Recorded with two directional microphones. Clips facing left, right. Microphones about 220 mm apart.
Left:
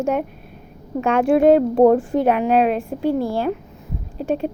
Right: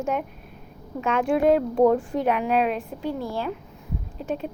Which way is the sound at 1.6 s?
40° left (ahead or behind).